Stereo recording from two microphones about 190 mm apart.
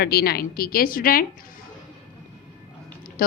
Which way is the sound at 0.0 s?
55° left (ahead or behind).